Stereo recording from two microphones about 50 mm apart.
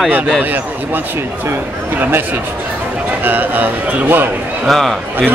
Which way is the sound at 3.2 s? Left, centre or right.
Right.